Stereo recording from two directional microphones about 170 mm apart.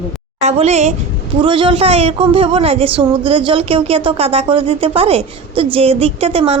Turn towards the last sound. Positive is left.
turn(degrees=-35)  # may be behind; listen again after turning